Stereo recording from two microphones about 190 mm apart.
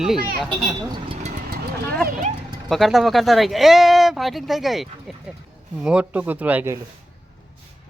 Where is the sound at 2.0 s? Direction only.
50° right (ahead or behind).